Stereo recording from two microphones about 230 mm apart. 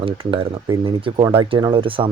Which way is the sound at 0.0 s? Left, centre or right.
Right.